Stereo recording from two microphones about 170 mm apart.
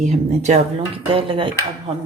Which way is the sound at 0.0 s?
45° right (ahead or behind).